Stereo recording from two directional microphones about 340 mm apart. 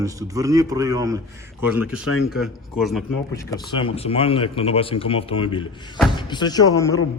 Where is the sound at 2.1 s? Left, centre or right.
Left.